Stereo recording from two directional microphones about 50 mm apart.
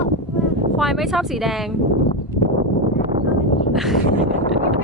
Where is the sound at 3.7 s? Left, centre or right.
Centre.